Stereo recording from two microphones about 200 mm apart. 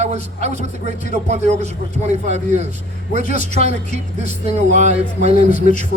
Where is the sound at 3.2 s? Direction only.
45° left (ahead or behind).